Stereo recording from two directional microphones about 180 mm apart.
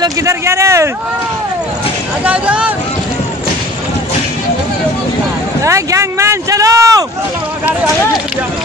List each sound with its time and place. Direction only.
0.0 s speech: 15° right (ahead or behind)
2.2 s speech: 5° right (ahead or behind)
5.6 s speech: 15° right (ahead or behind)